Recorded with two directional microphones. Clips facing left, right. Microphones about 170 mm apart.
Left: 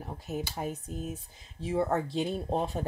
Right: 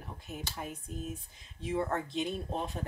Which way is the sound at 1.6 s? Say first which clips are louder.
Left 4 dB; 35° left (ahead or behind).